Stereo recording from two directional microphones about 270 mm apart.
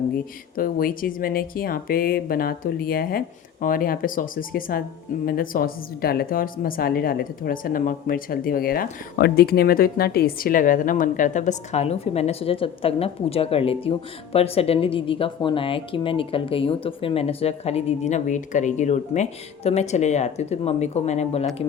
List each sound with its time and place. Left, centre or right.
0.5 s speech: left